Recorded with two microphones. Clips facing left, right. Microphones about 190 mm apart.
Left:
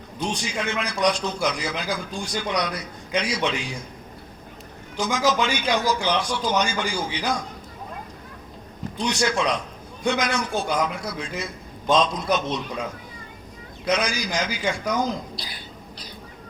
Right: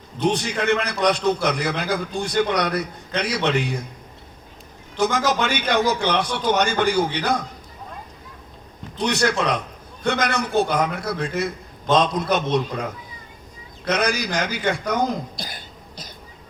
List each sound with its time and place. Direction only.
0.2 s a man's voice: 60° right (ahead or behind)
4.9 s a man's voice: 60° right (ahead or behind)
9.0 s a man's voice: 60° right (ahead or behind)
13.9 s a man's voice: 60° right (ahead or behind)